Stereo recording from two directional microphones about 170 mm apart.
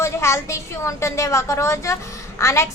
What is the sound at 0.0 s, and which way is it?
Speech, 15° left (ahead or behind).